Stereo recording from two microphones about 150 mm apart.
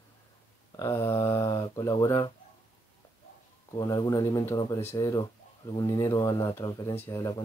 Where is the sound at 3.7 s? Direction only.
25° left (ahead or behind).